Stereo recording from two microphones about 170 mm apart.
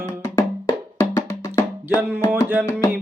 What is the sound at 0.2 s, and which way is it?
Music, 15° left (ahead or behind).